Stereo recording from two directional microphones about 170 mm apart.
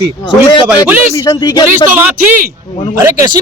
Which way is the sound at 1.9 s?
10° right (ahead or behind).